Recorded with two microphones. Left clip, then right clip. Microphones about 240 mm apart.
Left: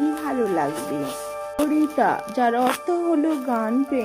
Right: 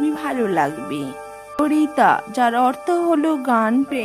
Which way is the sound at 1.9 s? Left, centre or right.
Right.